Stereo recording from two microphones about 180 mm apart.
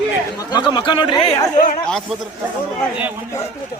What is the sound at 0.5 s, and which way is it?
Speech, 25° left (ahead or behind).